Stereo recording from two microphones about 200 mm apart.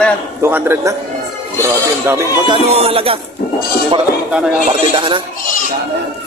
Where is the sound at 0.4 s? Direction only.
10° right (ahead or behind); by 3.2 s 30° right (ahead or behind).